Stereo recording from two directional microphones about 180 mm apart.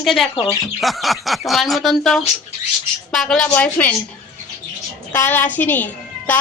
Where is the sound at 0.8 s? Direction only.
Centre (ahead or behind).